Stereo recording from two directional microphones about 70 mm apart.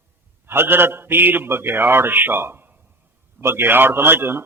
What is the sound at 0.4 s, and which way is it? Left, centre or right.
A man's voice, right.